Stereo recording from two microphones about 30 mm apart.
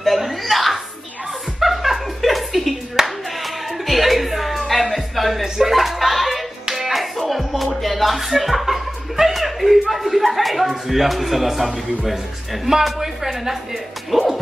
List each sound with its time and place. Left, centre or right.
0.0 s chuckle: centre
3.0 s clapping: centre
3.4 s music: centre
4.9 s a sound: centre
6.7 s music: centre
10.9 s a man's voice: centre